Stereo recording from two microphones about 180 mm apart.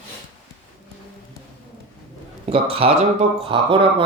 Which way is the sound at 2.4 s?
30° right (ahead or behind).